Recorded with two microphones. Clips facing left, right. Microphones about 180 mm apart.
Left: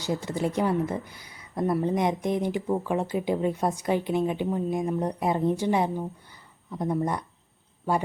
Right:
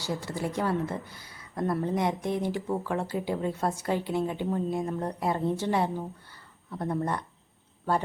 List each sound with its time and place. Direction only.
0.0 s a woman's voice: 20° left (ahead or behind)